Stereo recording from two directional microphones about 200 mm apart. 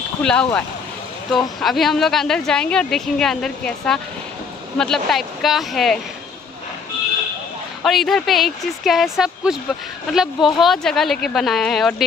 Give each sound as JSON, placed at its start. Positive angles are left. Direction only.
{"t": 0.2, "sound": "speech", "side_deg": 5}
{"t": 7.8, "sound": "speech", "side_deg": 0}